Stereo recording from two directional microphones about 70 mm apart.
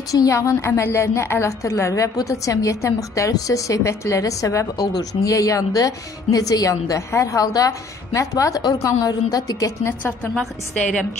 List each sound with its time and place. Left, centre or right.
0.3 s a woman's voice: left
9.8 s a woman's voice: left
10.3 s a woman's voice: centre